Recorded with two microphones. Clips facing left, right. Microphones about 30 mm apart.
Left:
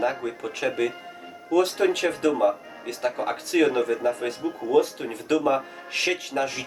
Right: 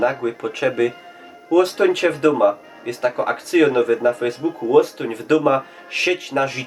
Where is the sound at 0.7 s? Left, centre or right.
Centre.